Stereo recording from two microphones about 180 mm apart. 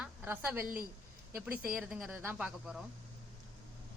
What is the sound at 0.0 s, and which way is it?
A woman's voice, 10° right (ahead or behind).